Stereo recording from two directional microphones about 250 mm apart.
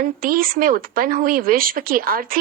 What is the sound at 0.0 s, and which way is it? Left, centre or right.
Speech, right.